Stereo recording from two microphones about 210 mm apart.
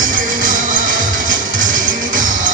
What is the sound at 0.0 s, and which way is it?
Music, 40° right (ahead or behind).